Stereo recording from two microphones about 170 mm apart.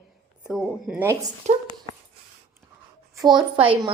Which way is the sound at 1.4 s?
40° right (ahead or behind).